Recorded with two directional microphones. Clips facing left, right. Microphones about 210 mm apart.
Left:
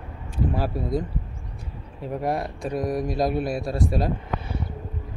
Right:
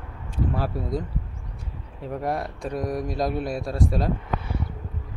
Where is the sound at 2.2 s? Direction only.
10° left (ahead or behind).